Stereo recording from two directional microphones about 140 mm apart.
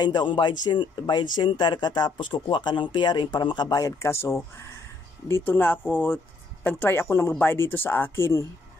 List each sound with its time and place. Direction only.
0.0 s speech: 35° left (ahead or behind)